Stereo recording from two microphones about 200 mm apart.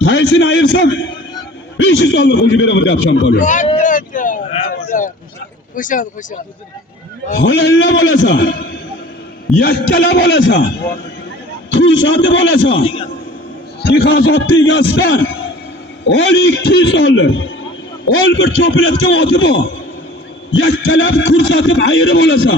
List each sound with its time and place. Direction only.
0.0 s a man's voice: 65° left (ahead or behind)
3.4 s a sound: 40° left (ahead or behind)
5.7 s speech: 40° left (ahead or behind)
7.3 s a man's voice: 65° left (ahead or behind)
11.7 s a man's voice: 65° left (ahead or behind)
13.8 s a man's voice: 60° left (ahead or behind)